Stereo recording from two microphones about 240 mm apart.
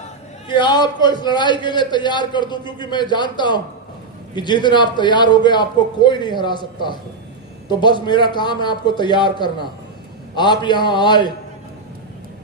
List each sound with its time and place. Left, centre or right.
0.4 s a man's voice: centre